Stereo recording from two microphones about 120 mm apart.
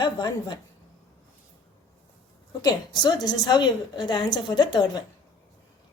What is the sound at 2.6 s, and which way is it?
A woman's voice, 35° left (ahead or behind).